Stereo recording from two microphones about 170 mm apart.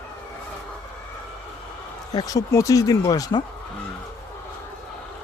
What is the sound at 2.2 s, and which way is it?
Speech, 20° left (ahead or behind).